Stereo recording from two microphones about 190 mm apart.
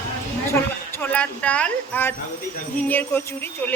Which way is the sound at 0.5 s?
10° left (ahead or behind).